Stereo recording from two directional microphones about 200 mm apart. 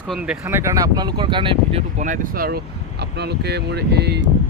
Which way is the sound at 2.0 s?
40° right (ahead or behind).